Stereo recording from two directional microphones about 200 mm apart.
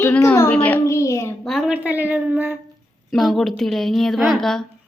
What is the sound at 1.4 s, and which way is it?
A woman's voice, centre (ahead or behind).